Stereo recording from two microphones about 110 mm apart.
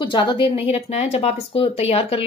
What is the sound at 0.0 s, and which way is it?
Speech, 50° left (ahead or behind).